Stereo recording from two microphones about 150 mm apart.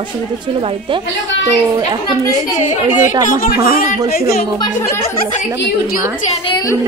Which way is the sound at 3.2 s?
70° left (ahead or behind).